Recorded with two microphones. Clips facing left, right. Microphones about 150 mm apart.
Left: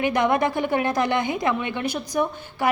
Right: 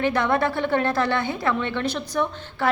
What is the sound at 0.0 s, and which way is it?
Speech, 15° left (ahead or behind).